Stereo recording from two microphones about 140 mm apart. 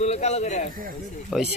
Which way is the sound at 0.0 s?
55° left (ahead or behind).